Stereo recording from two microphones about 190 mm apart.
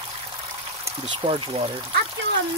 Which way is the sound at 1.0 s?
30° right (ahead or behind).